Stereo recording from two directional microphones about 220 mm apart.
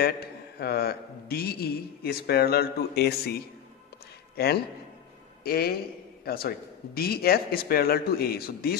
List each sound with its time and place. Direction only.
0.6 s a man's voice: 45° left (ahead or behind)
5.4 s a man's voice: 45° left (ahead or behind)